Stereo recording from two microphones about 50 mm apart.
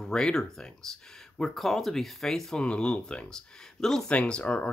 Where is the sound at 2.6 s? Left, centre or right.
Centre.